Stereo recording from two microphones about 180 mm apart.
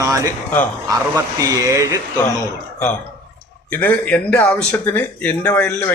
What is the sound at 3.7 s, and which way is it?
Speech, 10° left (ahead or behind).